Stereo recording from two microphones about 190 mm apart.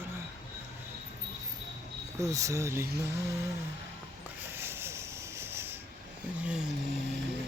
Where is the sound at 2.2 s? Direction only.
15° right (ahead or behind).